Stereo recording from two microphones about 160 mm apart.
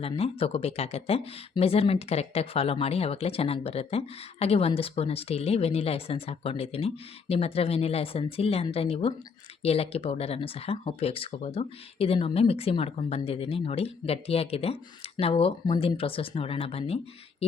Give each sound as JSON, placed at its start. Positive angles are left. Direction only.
{"t": 0.0, "sound": "speech", "side_deg": 35}